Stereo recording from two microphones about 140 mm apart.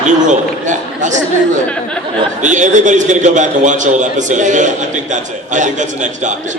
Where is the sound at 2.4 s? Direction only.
60° right (ahead or behind).